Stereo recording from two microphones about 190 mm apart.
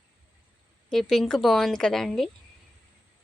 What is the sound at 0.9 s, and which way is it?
Speech, centre (ahead or behind).